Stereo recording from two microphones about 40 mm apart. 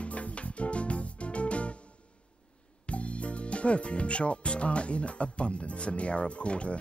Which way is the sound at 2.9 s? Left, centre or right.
Left.